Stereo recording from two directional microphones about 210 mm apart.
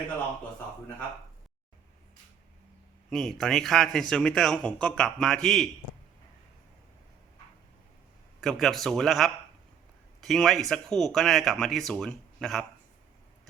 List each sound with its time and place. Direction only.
3.1 s a man's voice: centre (ahead or behind)
8.4 s a man's voice: centre (ahead or behind)